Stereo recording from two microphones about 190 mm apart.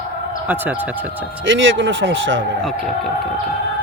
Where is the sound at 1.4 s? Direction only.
80° right.